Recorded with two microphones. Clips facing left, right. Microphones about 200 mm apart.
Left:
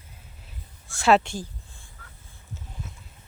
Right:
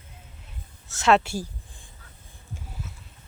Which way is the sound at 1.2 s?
10° right (ahead or behind).